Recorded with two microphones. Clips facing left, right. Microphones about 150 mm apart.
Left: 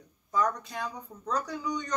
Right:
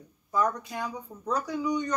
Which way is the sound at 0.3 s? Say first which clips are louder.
Right 1 dB; 10° right (ahead or behind).